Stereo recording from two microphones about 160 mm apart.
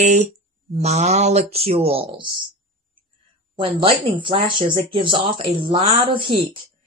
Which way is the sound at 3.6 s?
30° right (ahead or behind).